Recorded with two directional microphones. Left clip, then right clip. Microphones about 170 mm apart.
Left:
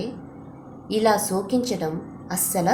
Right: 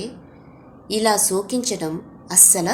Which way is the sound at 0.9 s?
40° right (ahead or behind).